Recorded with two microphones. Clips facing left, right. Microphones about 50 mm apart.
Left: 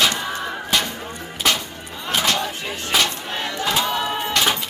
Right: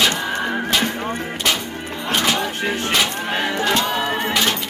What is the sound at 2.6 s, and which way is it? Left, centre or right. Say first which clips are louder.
Music: right 7 dB; right.